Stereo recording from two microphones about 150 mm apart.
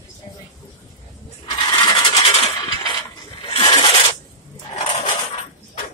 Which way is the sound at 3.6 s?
30° left (ahead or behind).